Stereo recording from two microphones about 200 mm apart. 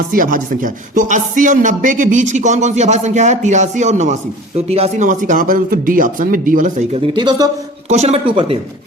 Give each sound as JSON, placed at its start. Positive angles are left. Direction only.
{"t": 0.1, "sound": "music", "side_deg": -45}
{"t": 7.9, "sound": "music", "side_deg": -35}